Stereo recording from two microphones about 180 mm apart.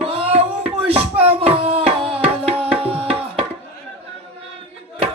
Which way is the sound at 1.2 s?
30° right (ahead or behind).